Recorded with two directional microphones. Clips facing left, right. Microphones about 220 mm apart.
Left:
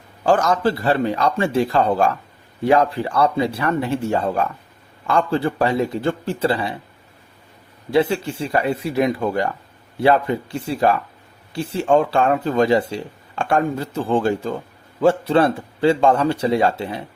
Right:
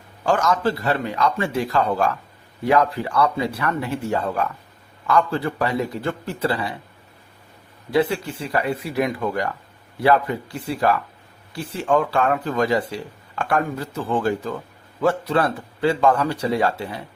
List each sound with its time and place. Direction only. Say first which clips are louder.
0.3 s a man's voice: left 3 dB; 35° left (ahead or behind)
7.9 s speech: left 2 dB; 25° left (ahead or behind)